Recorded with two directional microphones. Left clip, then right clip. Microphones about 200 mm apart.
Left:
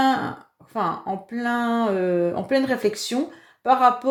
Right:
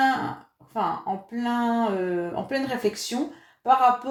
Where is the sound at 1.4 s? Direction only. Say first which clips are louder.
Left 2 dB; 40° left (ahead or behind).